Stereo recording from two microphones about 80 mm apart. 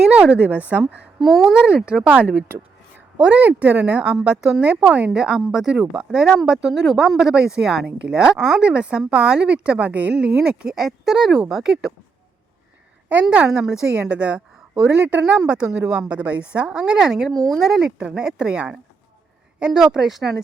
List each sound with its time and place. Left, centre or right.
0.0 s speech: centre
1.2 s speech: centre
1.5 s speech: centre
13.5 s speech: centre